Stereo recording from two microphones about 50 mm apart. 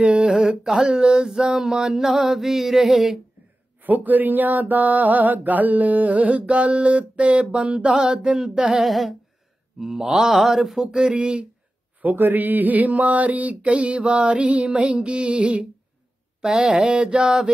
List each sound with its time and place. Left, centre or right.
0.0 s mantra: centre
3.8 s mantra: right; by 8.8 s centre
8.8 s a sound: centre
9.8 s mantra: centre
11.0 s music: centre
12.0 s mantra: right
14.8 s music: right
16.3 s mantra: centre